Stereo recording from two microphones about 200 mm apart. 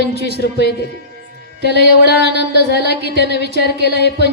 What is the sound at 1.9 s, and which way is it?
A woman's voice, 55° left (ahead or behind).